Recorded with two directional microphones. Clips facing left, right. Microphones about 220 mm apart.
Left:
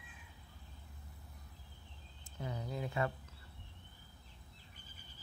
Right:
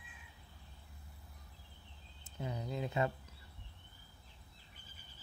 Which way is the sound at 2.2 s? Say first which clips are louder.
Right 1 dB; 20° right (ahead or behind).